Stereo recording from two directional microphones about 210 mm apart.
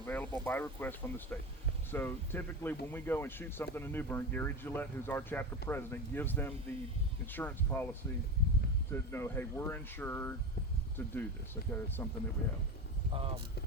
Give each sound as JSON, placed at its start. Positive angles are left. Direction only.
{"t": 0.0, "sound": "speech", "side_deg": 10}
{"t": 8.9, "sound": "speech", "side_deg": 10}
{"t": 13.1, "sound": "speech", "side_deg": -25}